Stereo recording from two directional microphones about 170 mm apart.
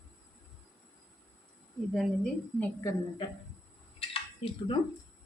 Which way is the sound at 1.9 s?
5° left (ahead or behind).